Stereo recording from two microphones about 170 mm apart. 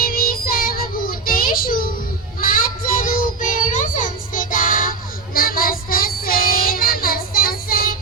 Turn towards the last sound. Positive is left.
turn(degrees=60)  # may be behind; listen again after turning